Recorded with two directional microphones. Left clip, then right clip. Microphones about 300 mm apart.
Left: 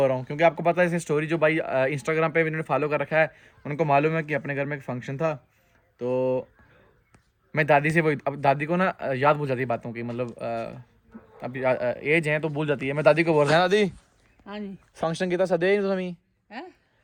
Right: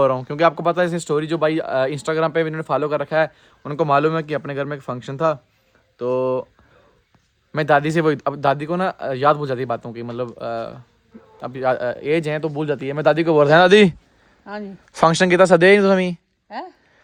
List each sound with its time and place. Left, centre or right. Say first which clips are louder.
0.0 s speech: right 5 dB; centre
7.5 s speech: right 4 dB; centre; by 13.9 s right
14.4 s speech: right 6 dB; centre
14.9 s speech: right 12 dB; right
16.5 s speech: right 8 dB; centre